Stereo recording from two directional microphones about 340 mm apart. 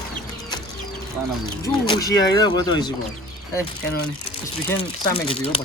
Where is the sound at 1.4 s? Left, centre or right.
Centre.